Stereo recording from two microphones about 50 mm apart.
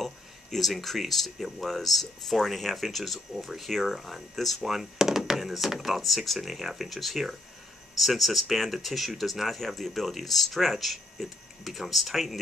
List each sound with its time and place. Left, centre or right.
0.0 s speech: centre